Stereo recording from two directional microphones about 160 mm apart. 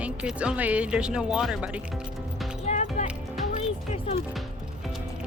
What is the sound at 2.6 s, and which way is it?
Music, 45° left (ahead or behind).